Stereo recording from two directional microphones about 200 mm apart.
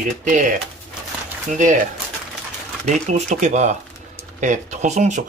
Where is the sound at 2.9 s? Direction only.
35° right (ahead or behind).